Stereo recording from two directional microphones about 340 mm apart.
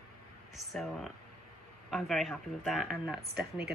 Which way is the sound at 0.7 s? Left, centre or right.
Centre.